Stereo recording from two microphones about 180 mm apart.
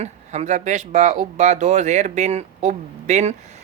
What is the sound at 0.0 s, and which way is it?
Speech, 40° right (ahead or behind).